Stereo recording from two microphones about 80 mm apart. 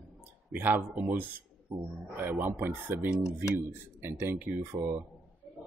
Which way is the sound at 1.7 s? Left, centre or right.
Right.